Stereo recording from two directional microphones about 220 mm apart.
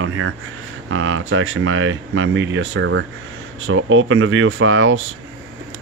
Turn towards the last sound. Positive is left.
turn(degrees=-65)  # may be behind; listen again after turning